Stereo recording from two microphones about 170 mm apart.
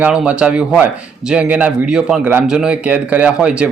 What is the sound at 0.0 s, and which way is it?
Speech, 5° right (ahead or behind).